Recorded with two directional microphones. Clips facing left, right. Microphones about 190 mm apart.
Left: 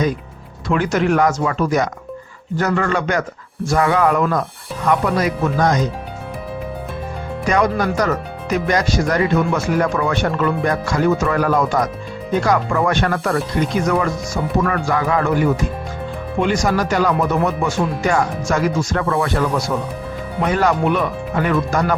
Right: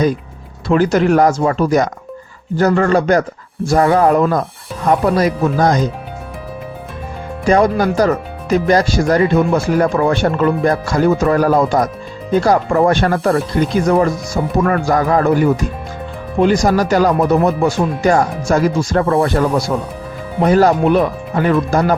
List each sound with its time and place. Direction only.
0.7 s speech: 35° right (ahead or behind)
7.4 s speech: 30° right (ahead or behind)